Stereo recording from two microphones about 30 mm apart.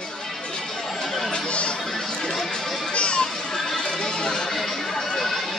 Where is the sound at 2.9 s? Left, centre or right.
Left.